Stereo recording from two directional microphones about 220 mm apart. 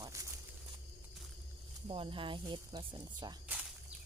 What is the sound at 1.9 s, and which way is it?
Speech, 25° right (ahead or behind).